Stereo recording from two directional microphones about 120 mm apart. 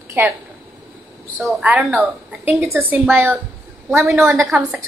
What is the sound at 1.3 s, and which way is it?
A woman's voice, 15° right (ahead or behind).